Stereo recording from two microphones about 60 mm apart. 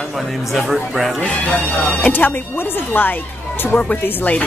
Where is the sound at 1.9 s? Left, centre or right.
Left.